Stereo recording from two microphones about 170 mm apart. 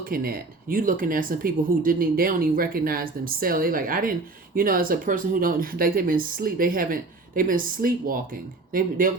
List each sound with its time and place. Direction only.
0.0 s speech: 60° right (ahead or behind)